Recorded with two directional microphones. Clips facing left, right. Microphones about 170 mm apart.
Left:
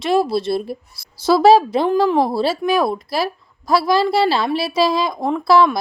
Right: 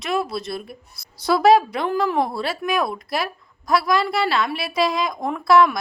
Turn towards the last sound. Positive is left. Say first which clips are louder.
# left 2 dB
turn(degrees=30)  # may be behind; listen again after turning